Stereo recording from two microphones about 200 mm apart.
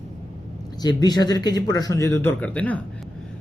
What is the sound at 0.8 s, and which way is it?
Speech, 20° left (ahead or behind).